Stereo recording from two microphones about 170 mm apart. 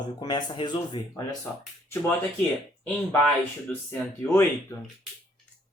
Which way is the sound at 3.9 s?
10° left (ahead or behind).